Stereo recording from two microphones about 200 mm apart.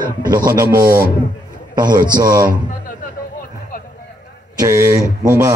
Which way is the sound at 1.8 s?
20° right (ahead or behind).